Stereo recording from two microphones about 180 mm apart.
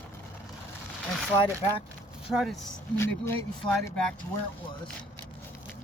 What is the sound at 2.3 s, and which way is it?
Speech, centre (ahead or behind).